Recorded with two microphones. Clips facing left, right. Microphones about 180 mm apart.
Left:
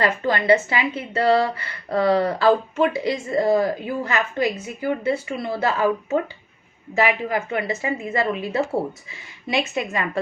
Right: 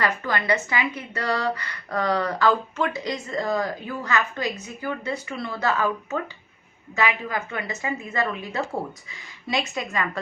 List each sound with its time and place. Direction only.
0.0 s a woman's voice: 25° left (ahead or behind)
7.3 s a woman's voice: 25° left (ahead or behind)
9.5 s a woman's voice: 25° left (ahead or behind)